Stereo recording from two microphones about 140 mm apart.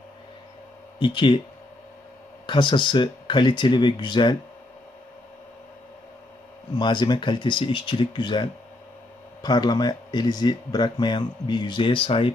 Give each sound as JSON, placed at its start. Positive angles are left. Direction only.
{"t": 0.9, "sound": "speech", "side_deg": 35}
{"t": 2.5, "sound": "speech", "side_deg": 35}
{"t": 6.7, "sound": "speech", "side_deg": 30}